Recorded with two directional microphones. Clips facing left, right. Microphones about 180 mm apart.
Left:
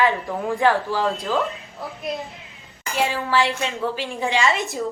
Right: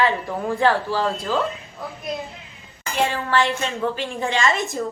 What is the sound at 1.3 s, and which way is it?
Speech, 15° left (ahead or behind).